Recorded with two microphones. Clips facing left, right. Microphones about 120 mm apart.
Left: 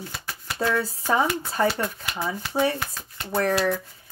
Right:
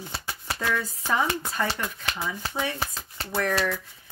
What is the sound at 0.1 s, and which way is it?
Shuffling cards, 30° right (ahead or behind).